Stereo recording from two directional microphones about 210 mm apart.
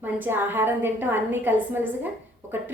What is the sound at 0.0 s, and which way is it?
A woman's voice, 10° right (ahead or behind).